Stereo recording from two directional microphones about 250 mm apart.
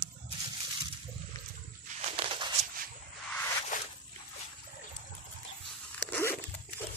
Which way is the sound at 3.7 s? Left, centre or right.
Left.